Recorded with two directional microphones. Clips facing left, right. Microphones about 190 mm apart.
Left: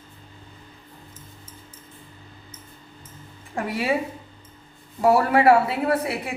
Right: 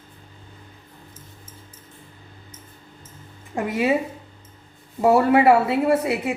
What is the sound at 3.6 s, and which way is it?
Speech, 20° right (ahead or behind).